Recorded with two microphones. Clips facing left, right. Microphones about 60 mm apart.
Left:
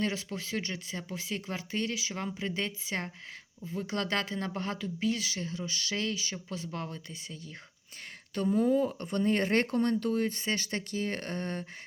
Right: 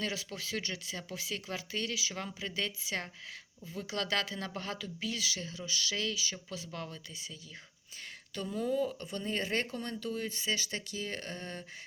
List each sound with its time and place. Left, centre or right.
0.0 s speech: left
8.4 s speech: left